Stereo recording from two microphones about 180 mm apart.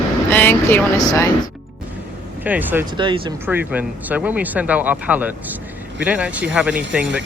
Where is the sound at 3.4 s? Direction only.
10° right (ahead or behind).